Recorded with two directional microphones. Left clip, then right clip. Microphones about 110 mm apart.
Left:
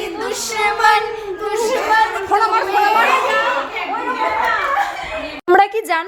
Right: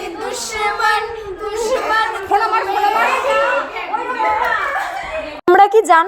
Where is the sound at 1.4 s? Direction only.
15° left (ahead or behind).